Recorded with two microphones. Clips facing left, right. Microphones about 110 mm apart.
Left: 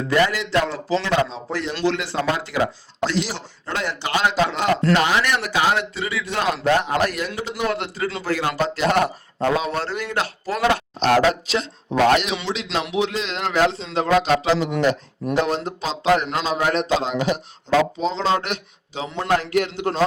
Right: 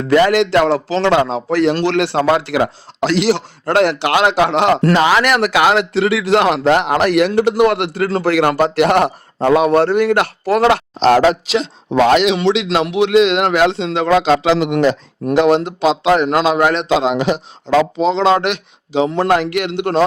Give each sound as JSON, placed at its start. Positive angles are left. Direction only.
{"t": 0.0, "sound": "a man's voice", "side_deg": -80}
{"t": 1.8, "sound": "speech", "side_deg": -75}
{"t": 12.7, "sound": "a man's voice", "side_deg": -70}